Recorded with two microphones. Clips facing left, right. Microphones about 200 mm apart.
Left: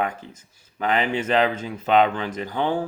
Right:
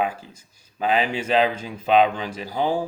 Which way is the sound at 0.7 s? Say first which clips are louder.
Even; 10° right (ahead or behind).